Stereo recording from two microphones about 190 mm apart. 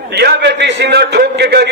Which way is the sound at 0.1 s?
60° right (ahead or behind).